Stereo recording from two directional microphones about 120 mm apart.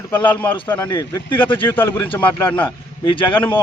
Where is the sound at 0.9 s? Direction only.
40° left (ahead or behind).